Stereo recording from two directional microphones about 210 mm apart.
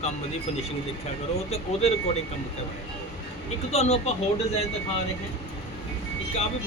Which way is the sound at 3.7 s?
30° left (ahead or behind).